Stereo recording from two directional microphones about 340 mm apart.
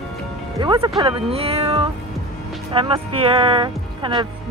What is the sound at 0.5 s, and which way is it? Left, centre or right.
Speech, centre.